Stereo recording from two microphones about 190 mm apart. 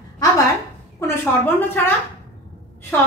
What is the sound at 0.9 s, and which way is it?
Speech, 10° left (ahead or behind).